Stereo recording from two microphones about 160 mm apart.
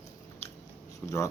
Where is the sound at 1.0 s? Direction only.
15° left (ahead or behind).